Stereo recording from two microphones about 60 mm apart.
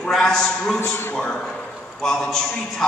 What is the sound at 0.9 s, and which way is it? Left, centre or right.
Speech, left.